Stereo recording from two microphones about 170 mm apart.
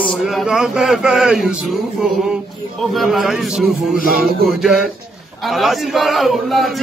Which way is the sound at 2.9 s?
Centre (ahead or behind).